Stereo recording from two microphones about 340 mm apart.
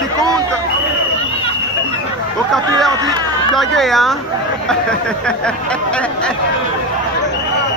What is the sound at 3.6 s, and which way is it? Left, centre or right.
Speech, centre.